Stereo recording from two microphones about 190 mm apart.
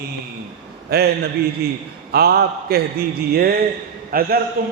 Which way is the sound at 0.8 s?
55° right (ahead or behind).